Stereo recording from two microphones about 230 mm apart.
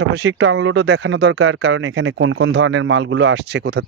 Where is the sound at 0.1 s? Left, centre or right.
Right.